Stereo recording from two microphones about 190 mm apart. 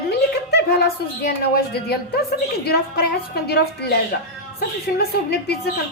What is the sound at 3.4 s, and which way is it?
Speech, 60° left (ahead or behind).